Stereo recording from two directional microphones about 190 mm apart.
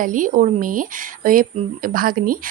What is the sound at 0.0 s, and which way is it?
A woman's voice, 45° right (ahead or behind).